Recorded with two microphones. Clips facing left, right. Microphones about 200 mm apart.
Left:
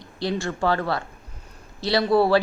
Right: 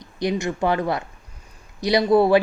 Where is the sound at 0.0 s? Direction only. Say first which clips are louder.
Right 3 dB; 20° right (ahead or behind).